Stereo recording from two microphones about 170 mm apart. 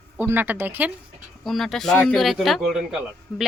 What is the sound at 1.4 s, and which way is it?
A woman's voice, centre (ahead or behind).